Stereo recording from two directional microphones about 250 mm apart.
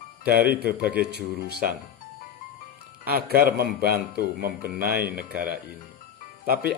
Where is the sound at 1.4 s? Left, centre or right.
Right.